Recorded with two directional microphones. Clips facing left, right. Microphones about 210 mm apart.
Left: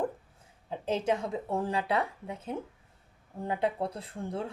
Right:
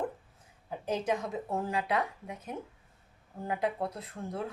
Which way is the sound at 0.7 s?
25° left (ahead or behind).